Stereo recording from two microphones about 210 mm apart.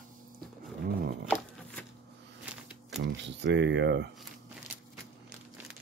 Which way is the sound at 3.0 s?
55° right (ahead or behind).